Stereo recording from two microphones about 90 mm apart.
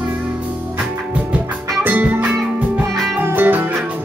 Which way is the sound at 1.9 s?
20° right (ahead or behind).